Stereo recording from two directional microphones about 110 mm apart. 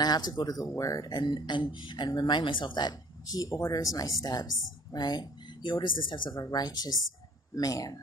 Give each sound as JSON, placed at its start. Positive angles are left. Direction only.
{"t": 0.0, "sound": "speech", "side_deg": 35}
{"t": 6.3, "sound": "speech", "side_deg": 35}